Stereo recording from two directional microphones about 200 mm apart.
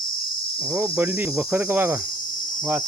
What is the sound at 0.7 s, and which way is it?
Cricket, 10° right (ahead or behind).